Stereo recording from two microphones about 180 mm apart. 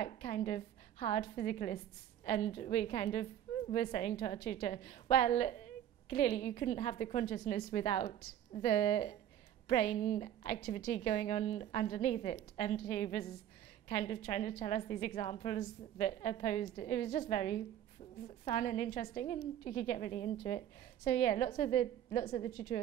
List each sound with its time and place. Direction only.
0.0 s a woman's voice: 30° left (ahead or behind)